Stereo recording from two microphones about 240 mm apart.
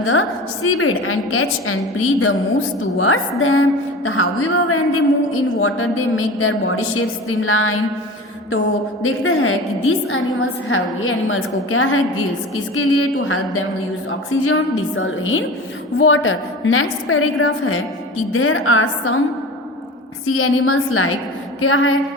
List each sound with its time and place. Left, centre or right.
0.0 s a woman's voice: left
9.0 s a woman's voice: left
20.2 s a woman's voice: left